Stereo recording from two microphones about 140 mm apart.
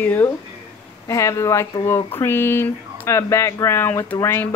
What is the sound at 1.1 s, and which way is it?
Speech, 20° left (ahead or behind).